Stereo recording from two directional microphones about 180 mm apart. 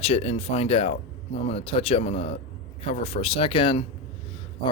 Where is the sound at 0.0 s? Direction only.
35° left (ahead or behind).